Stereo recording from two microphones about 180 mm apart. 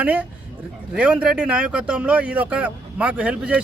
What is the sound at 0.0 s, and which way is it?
Speech, 10° right (ahead or behind).